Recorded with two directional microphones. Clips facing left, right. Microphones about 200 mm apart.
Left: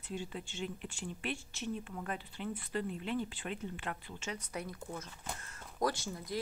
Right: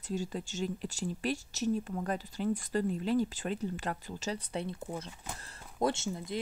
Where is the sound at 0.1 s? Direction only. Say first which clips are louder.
Right 6 dB; 40° right (ahead or behind).